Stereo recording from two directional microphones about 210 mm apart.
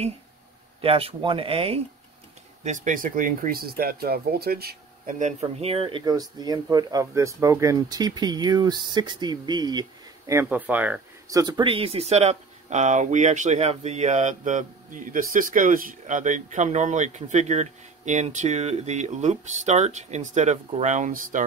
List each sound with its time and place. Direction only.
0.7 s speech: 25° right (ahead or behind)